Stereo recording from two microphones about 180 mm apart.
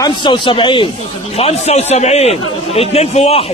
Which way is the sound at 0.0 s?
25° left (ahead or behind).